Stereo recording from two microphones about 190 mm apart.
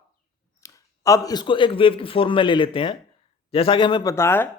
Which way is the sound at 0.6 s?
15° left (ahead or behind).